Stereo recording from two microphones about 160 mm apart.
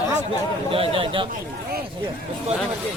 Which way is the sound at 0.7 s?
35° right (ahead or behind).